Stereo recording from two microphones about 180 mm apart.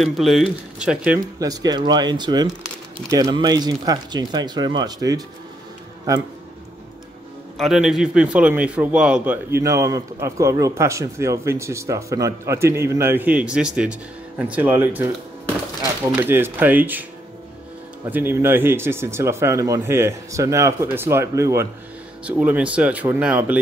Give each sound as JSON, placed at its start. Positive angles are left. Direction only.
{"t": 0.0, "sound": "speech", "side_deg": 0}
{"t": 7.5, "sound": "a man's voice", "side_deg": 0}
{"t": 16.1, "sound": "a man's voice", "side_deg": -10}
{"t": 18.1, "sound": "a man's voice", "side_deg": -10}